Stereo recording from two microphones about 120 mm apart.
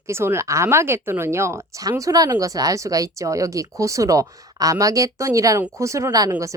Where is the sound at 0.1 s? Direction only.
20° right (ahead or behind).